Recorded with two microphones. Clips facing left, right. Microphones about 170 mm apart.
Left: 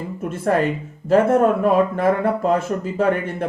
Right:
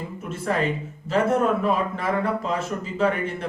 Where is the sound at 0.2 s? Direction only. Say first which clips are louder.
Left 6 dB; 55° left (ahead or behind).